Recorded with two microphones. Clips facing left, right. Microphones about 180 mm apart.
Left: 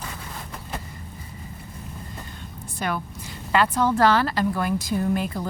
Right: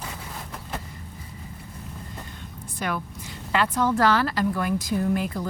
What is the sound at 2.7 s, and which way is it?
A woman's voice, 30° left (ahead or behind).